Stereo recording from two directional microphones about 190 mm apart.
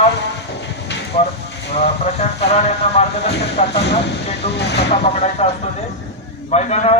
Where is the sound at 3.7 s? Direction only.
60° left (ahead or behind).